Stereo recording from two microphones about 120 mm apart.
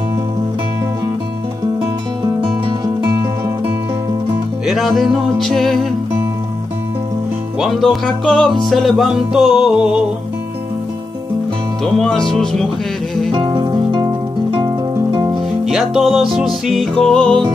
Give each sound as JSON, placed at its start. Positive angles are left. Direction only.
{"t": 4.6, "sound": "music", "side_deg": 0}
{"t": 7.6, "sound": "music", "side_deg": 0}
{"t": 11.8, "sound": "music", "side_deg": 5}
{"t": 13.3, "sound": "music", "side_deg": -40}
{"t": 15.6, "sound": "music", "side_deg": 0}